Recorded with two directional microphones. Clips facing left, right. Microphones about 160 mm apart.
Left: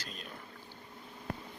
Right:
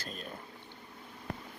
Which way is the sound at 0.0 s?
45° right (ahead or behind).